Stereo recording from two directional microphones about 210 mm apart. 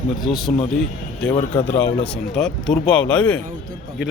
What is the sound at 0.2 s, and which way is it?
Speech, centre (ahead or behind).